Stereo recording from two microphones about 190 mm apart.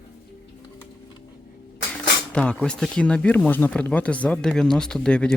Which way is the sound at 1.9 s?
5° left (ahead or behind).